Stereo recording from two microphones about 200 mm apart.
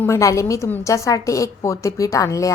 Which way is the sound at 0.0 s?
15° left (ahead or behind).